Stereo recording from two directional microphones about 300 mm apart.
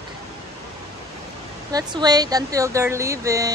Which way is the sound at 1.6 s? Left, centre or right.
Centre.